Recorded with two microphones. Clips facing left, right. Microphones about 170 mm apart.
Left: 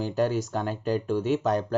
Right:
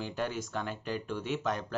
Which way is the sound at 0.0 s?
40° left (ahead or behind).